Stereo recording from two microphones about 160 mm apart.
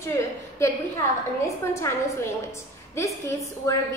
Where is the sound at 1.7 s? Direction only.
15° left (ahead or behind).